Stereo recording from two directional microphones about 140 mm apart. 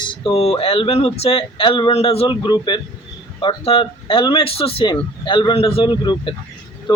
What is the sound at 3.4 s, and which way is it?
Speech, 40° left (ahead or behind).